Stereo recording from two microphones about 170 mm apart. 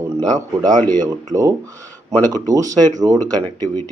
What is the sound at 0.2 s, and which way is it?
A man's voice, 20° right (ahead or behind).